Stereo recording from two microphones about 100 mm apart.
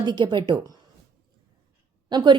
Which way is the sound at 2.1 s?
45° right (ahead or behind).